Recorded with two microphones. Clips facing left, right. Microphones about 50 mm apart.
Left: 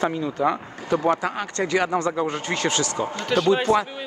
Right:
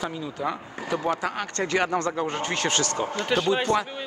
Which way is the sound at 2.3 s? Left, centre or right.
Right.